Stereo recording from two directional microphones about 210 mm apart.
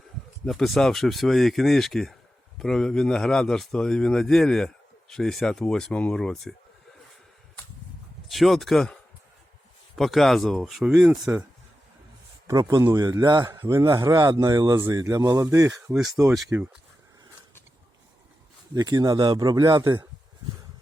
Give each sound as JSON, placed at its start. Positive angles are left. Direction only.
{"t": 0.4, "sound": "speech", "side_deg": 0}
{"t": 8.3, "sound": "speech", "side_deg": 0}
{"t": 12.5, "sound": "a man's voice", "side_deg": -15}
{"t": 18.7, "sound": "speech", "side_deg": -20}